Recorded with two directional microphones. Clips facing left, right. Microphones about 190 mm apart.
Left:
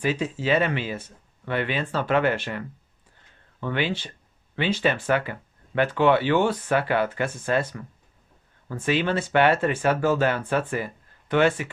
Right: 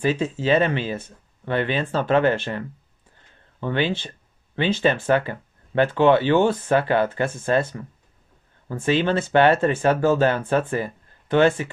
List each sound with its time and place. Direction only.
0.0 s speech: 25° right (ahead or behind)
3.6 s speech: 25° right (ahead or behind)